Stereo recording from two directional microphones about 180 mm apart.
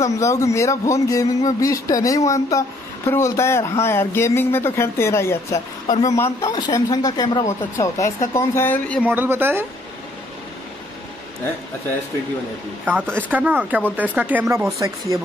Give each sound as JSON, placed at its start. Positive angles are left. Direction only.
{"t": 0.0, "sound": "speech", "side_deg": 15}
{"t": 9.0, "sound": "speech", "side_deg": -10}
{"t": 12.8, "sound": "speech", "side_deg": -10}